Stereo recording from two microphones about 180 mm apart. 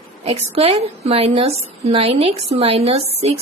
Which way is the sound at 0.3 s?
30° right (ahead or behind).